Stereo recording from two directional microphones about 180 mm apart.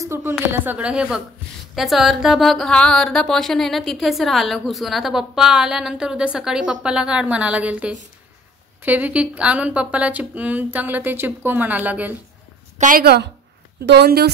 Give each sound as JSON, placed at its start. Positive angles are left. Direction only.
{"t": 0.0, "sound": "speech", "side_deg": -15}
{"t": 12.7, "sound": "a woman's voice", "side_deg": -50}